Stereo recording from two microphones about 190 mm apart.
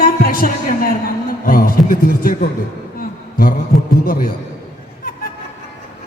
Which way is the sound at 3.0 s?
50° left (ahead or behind).